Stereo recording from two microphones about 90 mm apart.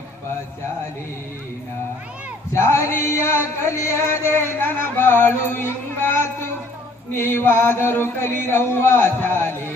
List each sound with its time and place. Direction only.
2.5 s male singing: 35° left (ahead or behind)
3.7 s music: 35° left (ahead or behind)